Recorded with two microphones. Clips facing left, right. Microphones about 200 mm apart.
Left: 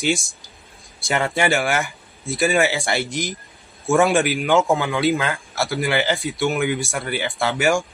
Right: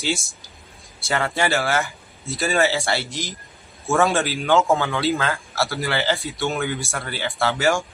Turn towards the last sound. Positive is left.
turn(degrees=15)  # may be behind; listen again after turning